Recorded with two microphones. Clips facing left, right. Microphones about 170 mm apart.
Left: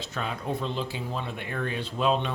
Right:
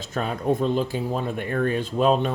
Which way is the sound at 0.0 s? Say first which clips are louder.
Right 7 dB; 45° right (ahead or behind).